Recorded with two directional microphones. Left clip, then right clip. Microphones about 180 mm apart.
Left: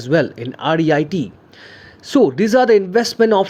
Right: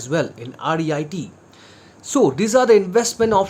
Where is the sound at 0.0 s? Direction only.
25° left (ahead or behind).